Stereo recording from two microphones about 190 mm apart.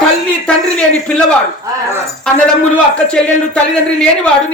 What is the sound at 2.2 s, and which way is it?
Speech, 5° left (ahead or behind).